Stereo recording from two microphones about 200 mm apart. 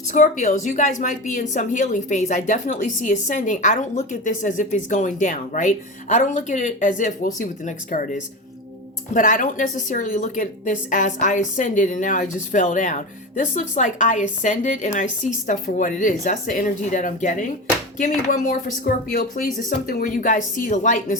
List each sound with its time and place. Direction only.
0.1 s a woman's voice: 40° left (ahead or behind)